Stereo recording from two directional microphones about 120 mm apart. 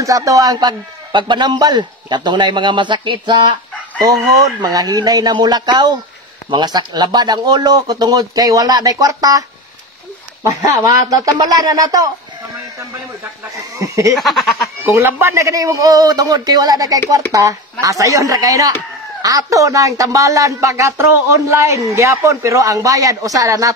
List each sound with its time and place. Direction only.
0.0 s a man's voice: 25° right (ahead or behind)
10.4 s a man's voice: 30° right (ahead or behind)
13.2 s speech: 25° right (ahead or behind)
14.1 s speech: centre (ahead or behind)
14.8 s speech: 15° right (ahead or behind)